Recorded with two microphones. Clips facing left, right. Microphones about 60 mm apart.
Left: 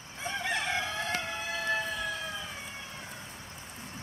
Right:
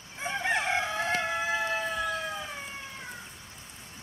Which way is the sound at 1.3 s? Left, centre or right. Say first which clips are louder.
Right 3 dB; centre.